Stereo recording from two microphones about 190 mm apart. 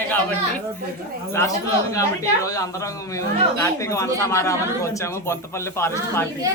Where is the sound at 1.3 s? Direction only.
15° left (ahead or behind).